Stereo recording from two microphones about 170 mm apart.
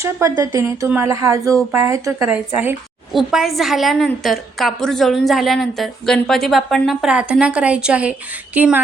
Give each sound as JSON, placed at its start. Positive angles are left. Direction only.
{"t": 0.0, "sound": "a woman's voice", "side_deg": -20}